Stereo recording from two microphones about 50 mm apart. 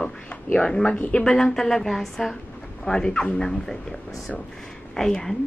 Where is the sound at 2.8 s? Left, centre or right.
Centre.